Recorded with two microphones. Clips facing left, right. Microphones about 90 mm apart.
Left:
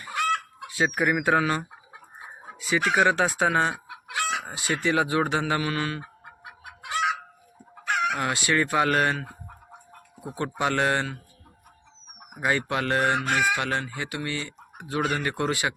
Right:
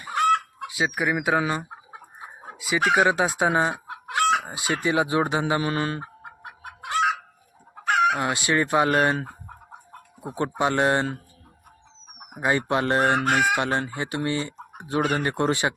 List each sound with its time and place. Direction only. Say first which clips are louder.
0.1 s chicken: right 5 dB; 35° right (ahead or behind)
0.7 s speech: left 1 dB; 15° right (ahead or behind)
3.8 s chicken: right 7 dB; 50° right (ahead or behind)
4.4 s speech: right 1 dB; 20° right (ahead or behind); by 6.9 s 40° right (ahead or behind)
8.1 s fowl: right 2 dB; 20° right (ahead or behind)
10.3 s fowl: right 3 dB; 25° right (ahead or behind)
12.3 s fowl: right 3 dB; 25° right (ahead or behind)
13.1 s chicken: right 3 dB; 50° right (ahead or behind)
13.6 s fowl: right 3 dB; 25° right (ahead or behind)
14.3 s speech: right 6 dB; 25° right (ahead or behind)
15.0 s fowl: right 3 dB; 30° right (ahead or behind)